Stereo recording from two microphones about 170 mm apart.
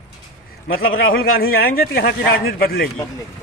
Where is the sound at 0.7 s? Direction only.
60° left (ahead or behind).